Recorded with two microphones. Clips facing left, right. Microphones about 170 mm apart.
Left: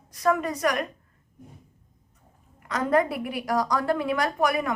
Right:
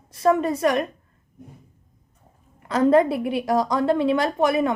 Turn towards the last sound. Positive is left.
turn(degrees=-25)  # may be behind; listen again after turning